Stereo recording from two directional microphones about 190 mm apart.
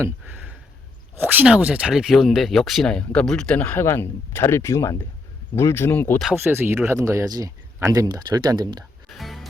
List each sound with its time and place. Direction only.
0.0 s a sound: 10° right (ahead or behind)
1.1 s speech: 10° right (ahead or behind); by 6.2 s 10° left (ahead or behind)
6.2 s speech: 10° right (ahead or behind)
9.0 s music: centre (ahead or behind)